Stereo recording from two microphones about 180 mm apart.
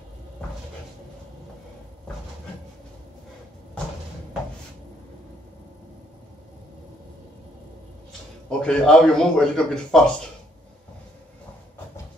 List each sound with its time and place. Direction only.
8.5 s a man's voice: 5° left (ahead or behind)